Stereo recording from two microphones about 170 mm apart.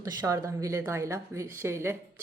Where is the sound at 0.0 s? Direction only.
20° right (ahead or behind).